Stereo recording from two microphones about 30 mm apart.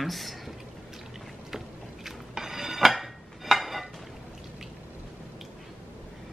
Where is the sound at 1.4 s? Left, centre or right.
Centre.